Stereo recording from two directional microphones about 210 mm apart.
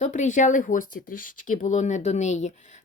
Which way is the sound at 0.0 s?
35° left (ahead or behind).